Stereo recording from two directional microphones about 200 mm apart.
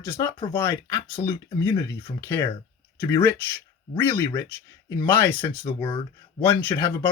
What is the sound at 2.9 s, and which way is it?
Speech, 15° left (ahead or behind).